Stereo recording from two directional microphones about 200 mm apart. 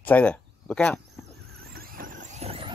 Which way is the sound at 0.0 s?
5° left (ahead or behind).